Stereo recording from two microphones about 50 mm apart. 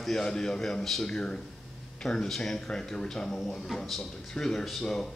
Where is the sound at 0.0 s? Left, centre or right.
Centre.